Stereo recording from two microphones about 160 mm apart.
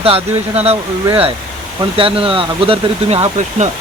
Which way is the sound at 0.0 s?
40° right (ahead or behind).